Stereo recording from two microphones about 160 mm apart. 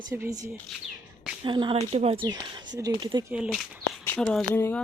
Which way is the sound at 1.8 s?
40° right (ahead or behind).